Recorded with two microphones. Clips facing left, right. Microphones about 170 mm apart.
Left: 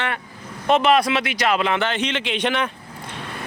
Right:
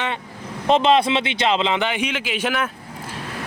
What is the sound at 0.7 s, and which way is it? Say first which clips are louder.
A man's voice: right 1 dB; 25° right (ahead or behind).